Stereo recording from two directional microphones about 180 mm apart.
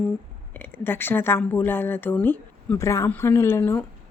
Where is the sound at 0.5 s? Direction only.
10° left (ahead or behind).